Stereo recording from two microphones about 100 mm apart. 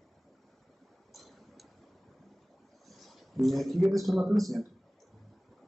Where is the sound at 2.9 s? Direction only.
Centre (ahead or behind).